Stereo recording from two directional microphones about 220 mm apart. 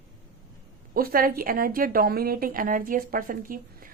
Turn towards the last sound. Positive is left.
turn(degrees=-40)  # may be behind; listen again after turning